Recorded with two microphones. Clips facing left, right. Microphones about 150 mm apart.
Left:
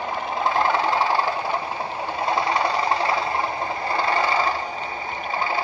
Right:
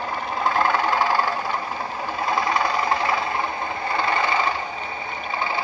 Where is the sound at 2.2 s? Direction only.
30° left (ahead or behind).